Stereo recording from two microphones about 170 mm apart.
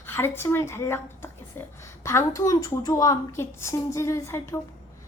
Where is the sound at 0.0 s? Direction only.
15° left (ahead or behind).